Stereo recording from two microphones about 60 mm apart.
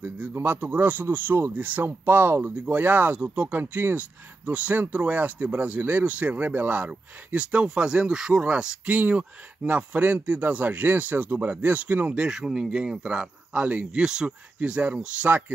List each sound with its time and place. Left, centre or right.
0.0 s speech: right
7.3 s speech: centre
8.8 s speech: right
12.3 s speech: centre